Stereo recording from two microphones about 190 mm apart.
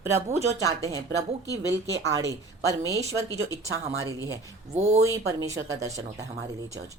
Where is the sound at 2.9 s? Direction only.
15° right (ahead or behind).